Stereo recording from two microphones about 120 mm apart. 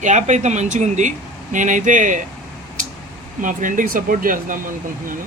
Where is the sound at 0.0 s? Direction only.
80° right.